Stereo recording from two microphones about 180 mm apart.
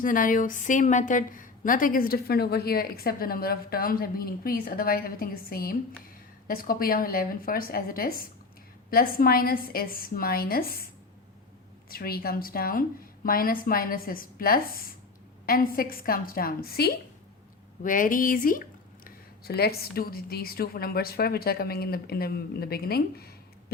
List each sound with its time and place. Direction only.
0.0 s a woman's voice: 50° left (ahead or behind)
11.9 s a woman's voice: 55° left (ahead or behind)
17.8 s a woman's voice: 50° left (ahead or behind)
19.0 s a woman's voice: 60° left (ahead or behind)